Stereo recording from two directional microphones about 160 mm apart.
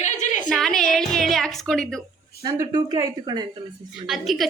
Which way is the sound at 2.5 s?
25° right (ahead or behind).